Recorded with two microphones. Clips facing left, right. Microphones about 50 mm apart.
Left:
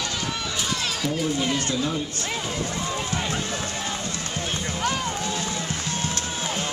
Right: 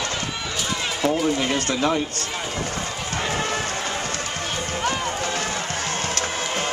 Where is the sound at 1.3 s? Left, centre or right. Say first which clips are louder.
Right 2 dB; right.